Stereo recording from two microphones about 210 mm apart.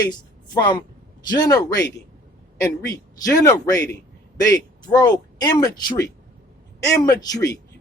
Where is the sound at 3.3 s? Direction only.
15° left (ahead or behind).